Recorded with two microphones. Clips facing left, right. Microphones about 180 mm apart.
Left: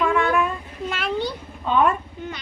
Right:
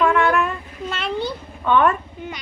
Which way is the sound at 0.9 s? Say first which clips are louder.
Even; 5° left (ahead or behind).